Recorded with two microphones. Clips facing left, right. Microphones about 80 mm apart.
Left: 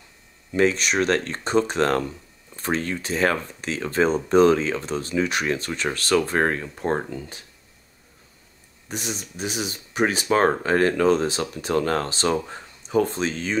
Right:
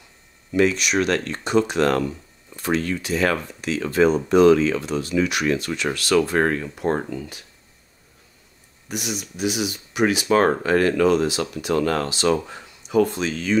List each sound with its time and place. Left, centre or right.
0.5 s speech: left
8.8 s speech: left